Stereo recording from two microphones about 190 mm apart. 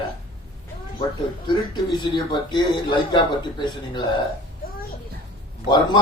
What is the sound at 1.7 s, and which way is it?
A man's voice, 25° left (ahead or behind).